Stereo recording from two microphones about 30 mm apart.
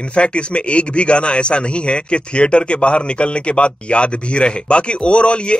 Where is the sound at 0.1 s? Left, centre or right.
Left.